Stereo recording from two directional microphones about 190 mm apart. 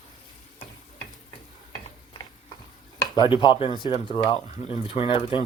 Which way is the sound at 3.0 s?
25° left (ahead or behind).